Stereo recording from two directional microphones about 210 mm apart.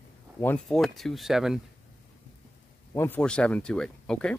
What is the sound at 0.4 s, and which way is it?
Speech, 5° left (ahead or behind).